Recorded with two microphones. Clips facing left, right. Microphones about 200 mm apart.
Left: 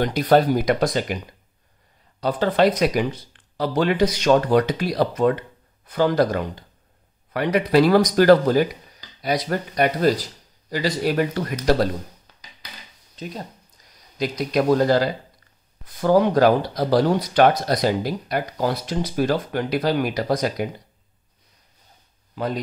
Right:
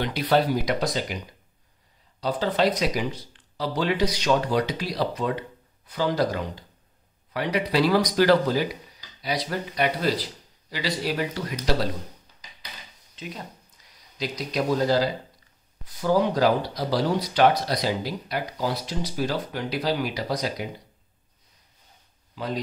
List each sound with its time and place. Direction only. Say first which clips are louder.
0.0 s speech: left 5 dB; 45° left (ahead or behind)
2.1 s speech: left 5 dB; 55° left (ahead or behind)
12.3 s a sound: left 3 dB; 65° left (ahead or behind)
13.1 s speech: left 4 dB; 40° left (ahead or behind)
14.1 s speech: left 6 dB; 55° left (ahead or behind)
22.3 s speech: left 4 dB; 55° left (ahead or behind)